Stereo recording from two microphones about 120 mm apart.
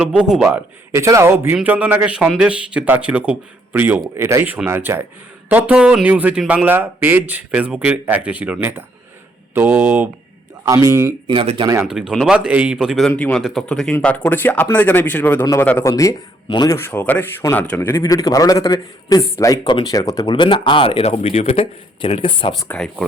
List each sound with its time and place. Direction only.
0.0 s speech: 5° right (ahead or behind)
0.5 s a man's voice: 25° right (ahead or behind)
11.3 s speech: 45° right (ahead or behind)
11.9 s a man's voice: 5° right (ahead or behind)
13.1 s speech: 10° left (ahead or behind)
15.8 s a man's voice: 25° left (ahead or behind)
16.7 s a man's voice: 20° left (ahead or behind)
17.9 s a man's voice: 30° left (ahead or behind); by 22.5 s 45° left (ahead or behind)
22.7 s speech: 5° left (ahead or behind)